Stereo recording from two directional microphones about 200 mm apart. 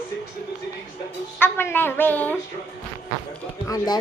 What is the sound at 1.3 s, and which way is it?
A woman's voice, 10° left (ahead or behind).